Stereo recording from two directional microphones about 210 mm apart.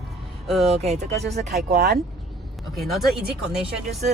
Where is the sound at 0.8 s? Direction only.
30° right (ahead or behind).